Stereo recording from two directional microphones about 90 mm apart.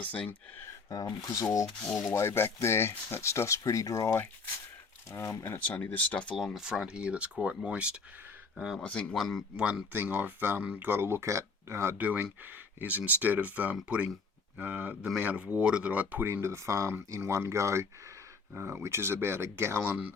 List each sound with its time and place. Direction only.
0.0 s speech: 15° left (ahead or behind)
0.6 s a sound: 40° left (ahead or behind)
1.6 s rub: 5° left (ahead or behind)
2.0 s speech: 25° left (ahead or behind)
5.5 s speech: 15° left (ahead or behind)
6.6 s speech: 5° right (ahead or behind)
8.8 s speech: 10° left (ahead or behind)
9.1 s rub: centre (ahead or behind)
9.6 s speech: 10° right (ahead or behind)
9.9 s speech: 25° right (ahead or behind)